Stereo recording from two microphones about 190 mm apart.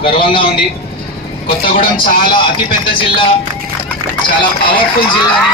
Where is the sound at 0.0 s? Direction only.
25° left (ahead or behind).